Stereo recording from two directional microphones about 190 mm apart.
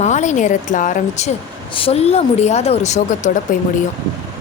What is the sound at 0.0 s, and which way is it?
A woman's voice, 40° left (ahead or behind).